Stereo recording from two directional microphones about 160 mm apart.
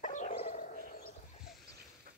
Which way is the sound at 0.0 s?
50° left (ahead or behind).